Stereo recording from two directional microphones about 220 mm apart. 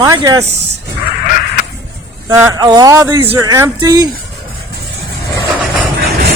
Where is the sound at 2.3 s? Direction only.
15° right (ahead or behind).